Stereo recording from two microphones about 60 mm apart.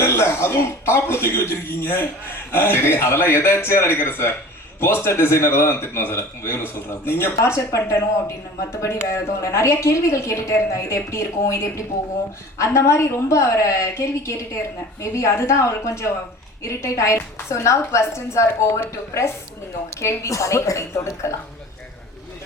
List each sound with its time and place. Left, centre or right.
0.0 s a man's voice: left
7.4 s a man's voice: left